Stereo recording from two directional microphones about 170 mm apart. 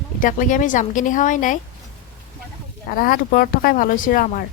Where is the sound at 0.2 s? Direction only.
50° left (ahead or behind).